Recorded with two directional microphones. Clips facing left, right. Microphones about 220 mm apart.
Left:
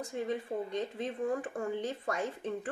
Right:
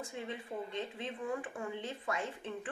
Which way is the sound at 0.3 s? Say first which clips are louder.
Left 7 dB; 40° left (ahead or behind).